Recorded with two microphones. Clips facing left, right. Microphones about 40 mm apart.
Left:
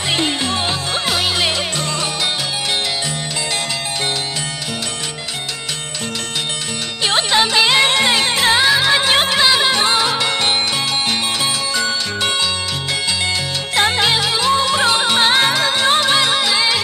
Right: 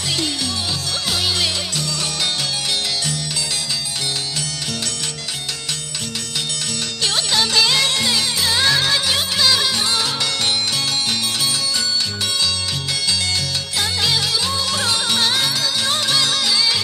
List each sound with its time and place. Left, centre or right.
0.1 s music: left
7.1 s music: left
8.5 s music: centre
8.9 s music: left
13.7 s music: left